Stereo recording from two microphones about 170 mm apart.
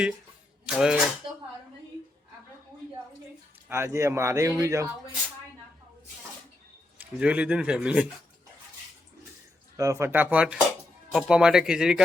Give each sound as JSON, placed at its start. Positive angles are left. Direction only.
{"t": 0.7, "sound": "speech", "side_deg": -5}
{"t": 3.7, "sound": "speech", "side_deg": -15}
{"t": 7.2, "sound": "speech", "side_deg": -5}
{"t": 9.7, "sound": "speech", "side_deg": -20}